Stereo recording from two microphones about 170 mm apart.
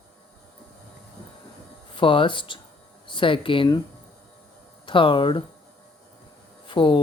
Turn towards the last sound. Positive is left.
turn(degrees=30)  # may be behind; listen again after turning